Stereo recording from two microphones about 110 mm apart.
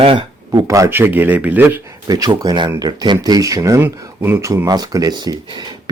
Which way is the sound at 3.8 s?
20° right (ahead or behind).